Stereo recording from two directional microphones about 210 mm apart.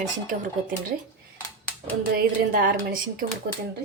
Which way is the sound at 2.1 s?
45° right (ahead or behind).